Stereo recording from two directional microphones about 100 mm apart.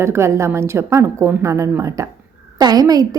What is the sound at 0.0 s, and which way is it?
A woman's voice, 25° right (ahead or behind).